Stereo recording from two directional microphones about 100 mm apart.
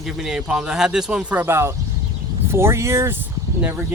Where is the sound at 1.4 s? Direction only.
25° right (ahead or behind).